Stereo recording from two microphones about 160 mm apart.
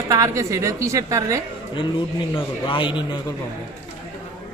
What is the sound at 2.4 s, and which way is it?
Speech, 30° left (ahead or behind).